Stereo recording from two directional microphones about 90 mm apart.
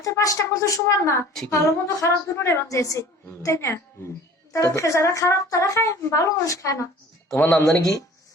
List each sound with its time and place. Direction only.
0.0 s speech: 40° left (ahead or behind)
7.3 s speech: 20° left (ahead or behind)